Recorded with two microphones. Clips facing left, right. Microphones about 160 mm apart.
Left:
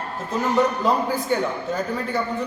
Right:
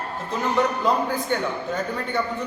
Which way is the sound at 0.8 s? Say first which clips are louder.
Left 1 dB; 5° left (ahead or behind).